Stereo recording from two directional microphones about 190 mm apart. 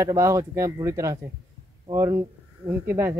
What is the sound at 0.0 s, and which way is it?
Speech, 15° right (ahead or behind).